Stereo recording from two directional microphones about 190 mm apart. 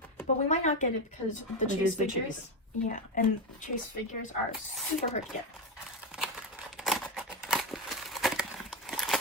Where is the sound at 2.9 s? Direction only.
45° left (ahead or behind).